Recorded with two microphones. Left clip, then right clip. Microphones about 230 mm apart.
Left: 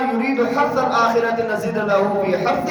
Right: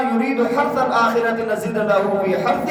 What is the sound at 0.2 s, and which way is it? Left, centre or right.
Speech, centre.